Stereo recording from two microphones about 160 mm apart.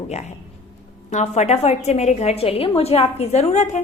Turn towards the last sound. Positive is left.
turn(degrees=45)  # may be behind; listen again after turning